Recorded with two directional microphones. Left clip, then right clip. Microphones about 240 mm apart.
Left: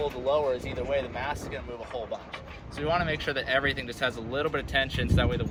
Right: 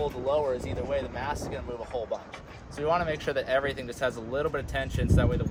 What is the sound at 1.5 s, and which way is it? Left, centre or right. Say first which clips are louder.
Speech: right 2 dB; right.